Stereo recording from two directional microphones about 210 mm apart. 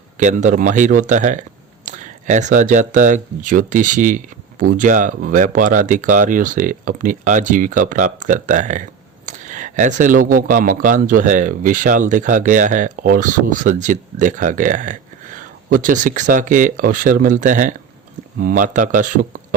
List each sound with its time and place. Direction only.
0.2 s speech: 35° right (ahead or behind)